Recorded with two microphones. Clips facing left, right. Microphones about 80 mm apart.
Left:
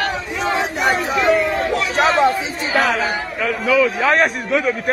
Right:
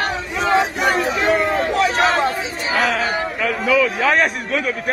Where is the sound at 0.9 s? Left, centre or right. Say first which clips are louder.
Left 2 dB; right.